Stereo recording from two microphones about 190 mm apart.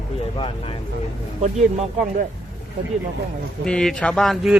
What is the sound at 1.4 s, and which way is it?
Speech, 35° right (ahead or behind).